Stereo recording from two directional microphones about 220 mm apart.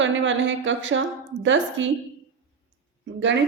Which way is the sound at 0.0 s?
55° right (ahead or behind).